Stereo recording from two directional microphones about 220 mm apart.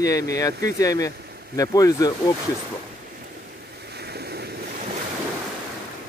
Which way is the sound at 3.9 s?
45° right (ahead or behind).